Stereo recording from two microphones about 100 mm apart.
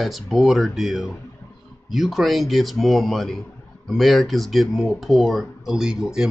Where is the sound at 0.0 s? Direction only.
Centre (ahead or behind).